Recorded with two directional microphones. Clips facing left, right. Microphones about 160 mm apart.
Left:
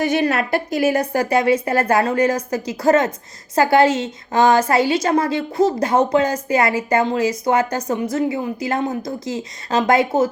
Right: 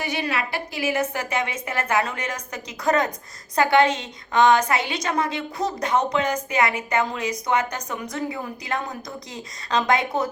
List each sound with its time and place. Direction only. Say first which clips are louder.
0.0 s a woman's voice: left 8 dB; 45° left (ahead or behind); by 10.2 s 30° left (ahead or behind)